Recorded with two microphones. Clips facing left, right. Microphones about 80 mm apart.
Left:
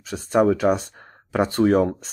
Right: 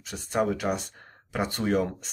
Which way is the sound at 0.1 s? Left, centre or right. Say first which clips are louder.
Left 8 dB; left.